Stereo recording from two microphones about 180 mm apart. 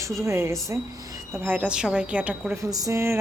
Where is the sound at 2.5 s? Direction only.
20° right (ahead or behind).